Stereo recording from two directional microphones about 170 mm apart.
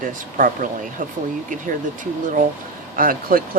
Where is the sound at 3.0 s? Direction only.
55° right (ahead or behind).